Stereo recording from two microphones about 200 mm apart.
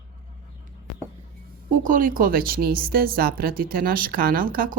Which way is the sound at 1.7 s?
40° right (ahead or behind).